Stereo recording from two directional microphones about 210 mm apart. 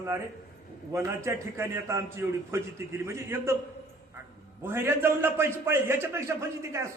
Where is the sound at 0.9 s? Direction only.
10° right (ahead or behind).